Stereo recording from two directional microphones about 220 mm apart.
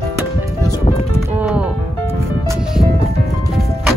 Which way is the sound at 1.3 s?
5° right (ahead or behind).